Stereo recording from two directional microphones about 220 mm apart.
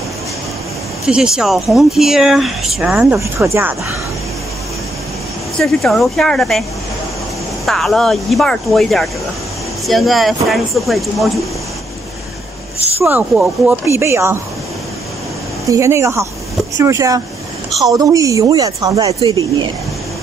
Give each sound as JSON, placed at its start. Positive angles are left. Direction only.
{"t": 1.0, "sound": "speech", "side_deg": -5}
{"t": 5.6, "sound": "speech", "side_deg": 0}
{"t": 7.6, "sound": "speech", "side_deg": 0}
{"t": 13.0, "sound": "speech", "side_deg": -10}
{"t": 15.7, "sound": "speech", "side_deg": -15}